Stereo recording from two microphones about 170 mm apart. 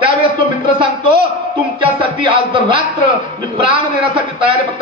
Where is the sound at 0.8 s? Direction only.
30° right (ahead or behind).